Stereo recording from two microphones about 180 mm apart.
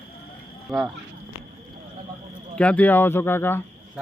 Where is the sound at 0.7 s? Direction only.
Centre (ahead or behind).